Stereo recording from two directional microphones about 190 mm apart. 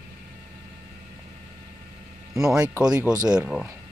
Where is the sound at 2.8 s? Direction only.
5° right (ahead or behind).